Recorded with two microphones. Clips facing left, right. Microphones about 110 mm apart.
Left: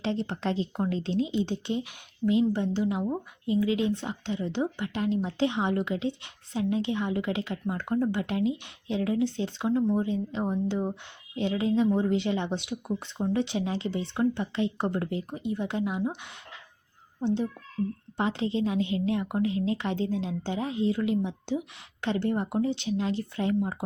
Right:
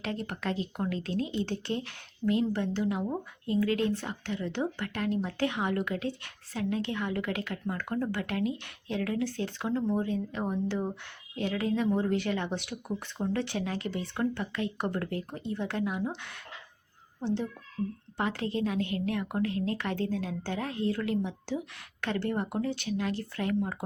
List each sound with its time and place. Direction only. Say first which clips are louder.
0.0 s a child's voice: left 4 dB; 25° left (ahead or behind)